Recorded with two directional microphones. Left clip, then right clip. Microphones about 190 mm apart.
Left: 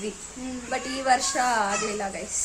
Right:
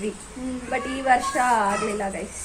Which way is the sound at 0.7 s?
10° left (ahead or behind).